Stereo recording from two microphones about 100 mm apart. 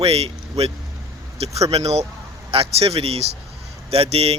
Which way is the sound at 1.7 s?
90° right.